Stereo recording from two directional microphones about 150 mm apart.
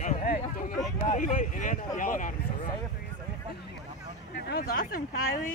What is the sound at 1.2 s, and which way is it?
Speech, 60° left (ahead or behind).